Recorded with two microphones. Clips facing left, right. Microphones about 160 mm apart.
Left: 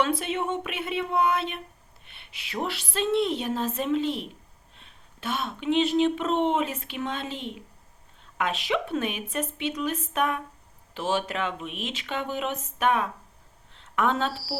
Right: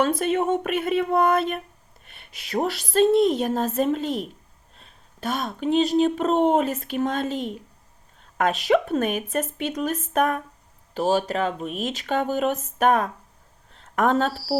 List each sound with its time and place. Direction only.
0.0 s speech: 45° right (ahead or behind)
13.7 s a sound: 40° right (ahead or behind)
14.3 s speech: centre (ahead or behind)